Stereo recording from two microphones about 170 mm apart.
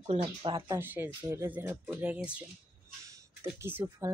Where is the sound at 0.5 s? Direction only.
15° right (ahead or behind).